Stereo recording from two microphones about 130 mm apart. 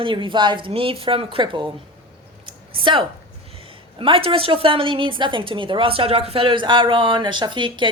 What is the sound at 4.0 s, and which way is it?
A woman's voice, 45° right (ahead or behind).